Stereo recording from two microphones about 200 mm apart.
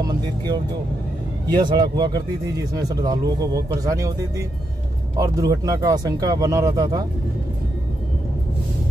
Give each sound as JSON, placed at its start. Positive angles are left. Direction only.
{"t": 0.0, "sound": "speech", "side_deg": -20}